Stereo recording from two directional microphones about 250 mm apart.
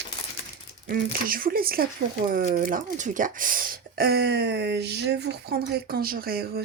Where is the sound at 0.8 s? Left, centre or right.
Right.